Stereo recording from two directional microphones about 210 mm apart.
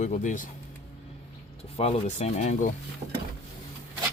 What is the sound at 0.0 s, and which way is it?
Speech, 35° left (ahead or behind).